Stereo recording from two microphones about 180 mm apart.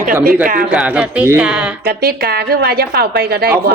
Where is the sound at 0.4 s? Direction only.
50° right (ahead or behind).